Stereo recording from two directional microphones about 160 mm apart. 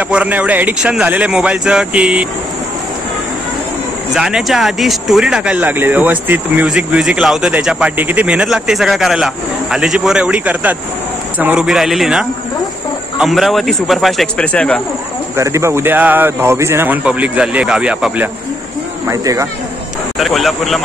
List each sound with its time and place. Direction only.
0.1 s speech: 10° right (ahead or behind)
4.1 s speech: 5° right (ahead or behind)
15.3 s speech: 15° right (ahead or behind)
19.0 s speech: 20° right (ahead or behind)
20.2 s speech: centre (ahead or behind)